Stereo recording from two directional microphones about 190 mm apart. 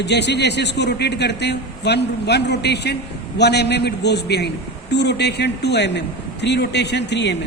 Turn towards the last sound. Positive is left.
turn(degrees=65)  # may be behind; listen again after turning